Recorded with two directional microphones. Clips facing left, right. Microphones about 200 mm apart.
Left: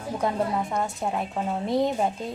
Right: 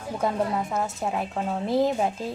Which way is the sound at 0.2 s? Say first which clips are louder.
Right 1 dB; centre (ahead or behind).